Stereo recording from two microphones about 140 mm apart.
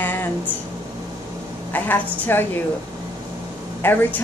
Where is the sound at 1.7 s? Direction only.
15° left (ahead or behind).